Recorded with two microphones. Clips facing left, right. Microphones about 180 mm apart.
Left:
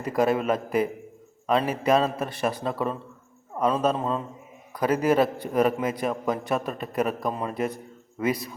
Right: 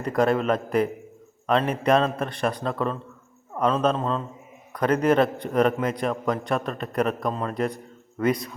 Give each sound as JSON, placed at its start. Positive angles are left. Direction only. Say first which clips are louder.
{"t": 0.0, "sound": "a man's voice", "louder": "right 1 dB", "side_deg": 5}